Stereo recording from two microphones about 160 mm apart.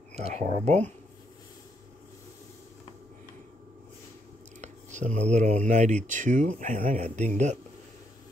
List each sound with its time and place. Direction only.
0.1 s speech: 45° right (ahead or behind)
4.6 s speech: 50° right (ahead or behind)